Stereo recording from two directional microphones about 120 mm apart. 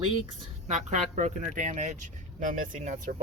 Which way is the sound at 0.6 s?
75° right (ahead or behind).